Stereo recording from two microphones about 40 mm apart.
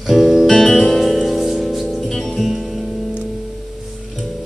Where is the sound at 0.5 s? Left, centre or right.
Centre.